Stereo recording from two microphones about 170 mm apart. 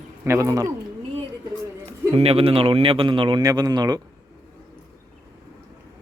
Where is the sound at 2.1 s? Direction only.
35° right (ahead or behind).